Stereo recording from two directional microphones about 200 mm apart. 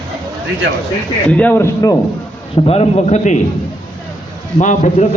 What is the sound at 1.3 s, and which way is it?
Speech, 10° left (ahead or behind).